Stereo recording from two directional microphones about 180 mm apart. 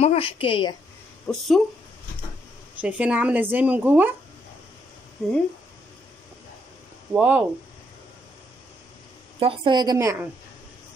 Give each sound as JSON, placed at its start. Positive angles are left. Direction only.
{"t": 0.0, "sound": "a woman's voice", "side_deg": 30}
{"t": 1.2, "sound": "speech", "side_deg": 5}
{"t": 2.8, "sound": "speech", "side_deg": -5}
{"t": 7.2, "sound": "speech", "side_deg": -10}
{"t": 9.4, "sound": "a woman's voice", "side_deg": -25}